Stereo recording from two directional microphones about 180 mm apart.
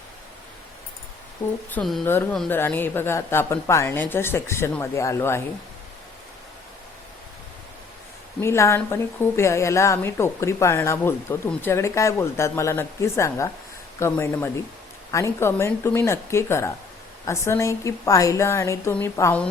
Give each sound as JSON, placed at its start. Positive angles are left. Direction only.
{"t": 1.7, "sound": "speech", "side_deg": 0}
{"t": 2.0, "sound": "a woman's voice", "side_deg": 10}
{"t": 8.4, "sound": "a woman's voice", "side_deg": 15}